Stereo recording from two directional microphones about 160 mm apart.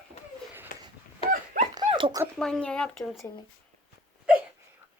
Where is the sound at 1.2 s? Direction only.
35° left (ahead or behind).